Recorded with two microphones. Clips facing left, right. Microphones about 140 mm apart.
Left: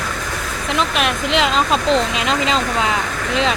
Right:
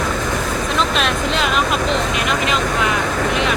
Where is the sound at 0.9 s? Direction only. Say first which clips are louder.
Right 1 dB; 60° left (ahead or behind).